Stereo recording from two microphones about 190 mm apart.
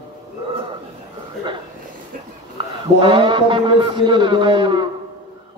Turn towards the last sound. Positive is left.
turn(degrees=-25)  # may be behind; listen again after turning